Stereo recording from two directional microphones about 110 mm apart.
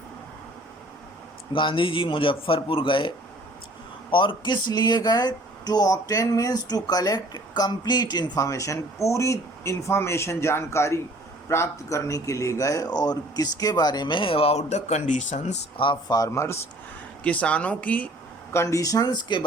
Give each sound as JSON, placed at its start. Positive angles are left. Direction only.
{"t": 1.5, "sound": "a man's voice", "side_deg": 50}
{"t": 4.1, "sound": "speech", "side_deg": 50}
{"t": 15.8, "sound": "a man's voice", "side_deg": 45}
{"t": 16.1, "sound": "speech", "side_deg": 30}
{"t": 17.2, "sound": "speech", "side_deg": 10}
{"t": 18.5, "sound": "speech", "side_deg": 25}